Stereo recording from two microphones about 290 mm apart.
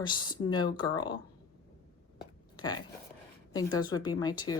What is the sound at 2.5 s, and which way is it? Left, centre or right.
Speech, centre.